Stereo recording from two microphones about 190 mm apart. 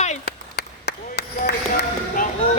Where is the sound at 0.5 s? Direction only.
60° left (ahead or behind).